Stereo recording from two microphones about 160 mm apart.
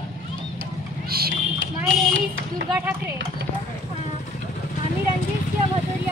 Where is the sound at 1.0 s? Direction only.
70° right (ahead or behind).